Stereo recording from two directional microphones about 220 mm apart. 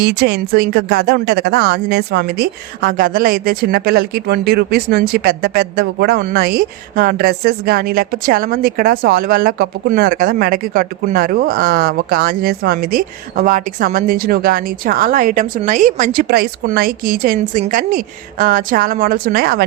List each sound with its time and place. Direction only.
0.0 s a woman's voice: 45° right (ahead or behind)